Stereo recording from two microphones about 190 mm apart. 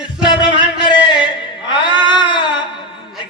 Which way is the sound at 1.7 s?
25° left (ahead or behind).